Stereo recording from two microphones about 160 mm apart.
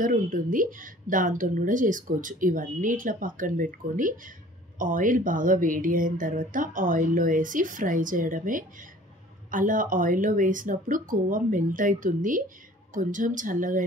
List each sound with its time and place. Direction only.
0.0 s a woman's voice: 60° right (ahead or behind)